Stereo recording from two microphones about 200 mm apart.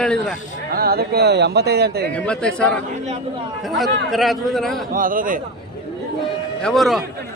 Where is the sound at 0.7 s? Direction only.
50° right (ahead or behind).